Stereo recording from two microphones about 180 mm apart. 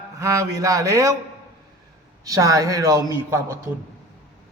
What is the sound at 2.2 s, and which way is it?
A man's voice, 20° right (ahead or behind).